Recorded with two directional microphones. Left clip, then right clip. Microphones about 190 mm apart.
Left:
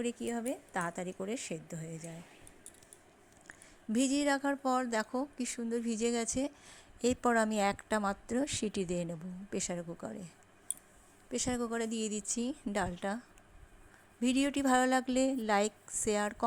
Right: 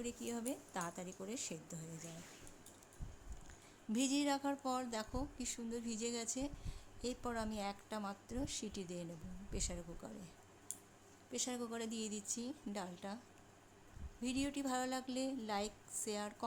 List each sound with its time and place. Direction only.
0.0 s speech: 25° left (ahead or behind)
3.9 s speech: 30° left (ahead or behind)
14.2 s speech: 40° left (ahead or behind)